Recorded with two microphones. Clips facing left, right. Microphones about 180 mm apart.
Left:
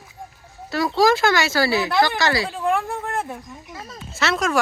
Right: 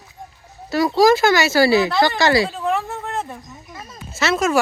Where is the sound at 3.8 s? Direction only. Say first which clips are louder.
Right 2 dB; 5° right (ahead or behind).